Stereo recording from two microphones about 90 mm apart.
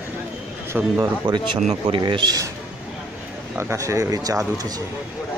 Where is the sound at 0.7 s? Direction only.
15° right (ahead or behind).